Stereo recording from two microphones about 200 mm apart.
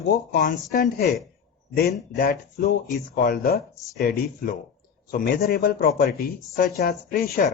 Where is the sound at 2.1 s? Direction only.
55° left (ahead or behind).